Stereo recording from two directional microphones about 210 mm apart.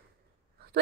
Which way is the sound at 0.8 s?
55° right (ahead or behind).